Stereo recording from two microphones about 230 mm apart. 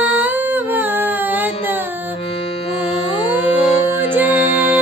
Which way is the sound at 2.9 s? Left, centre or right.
Left.